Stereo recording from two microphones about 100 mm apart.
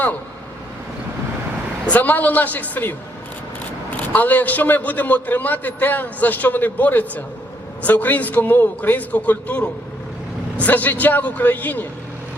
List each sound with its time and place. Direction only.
1.9 s a man's voice: 20° left (ahead or behind)
3.9 s a man's voice: 15° left (ahead or behind)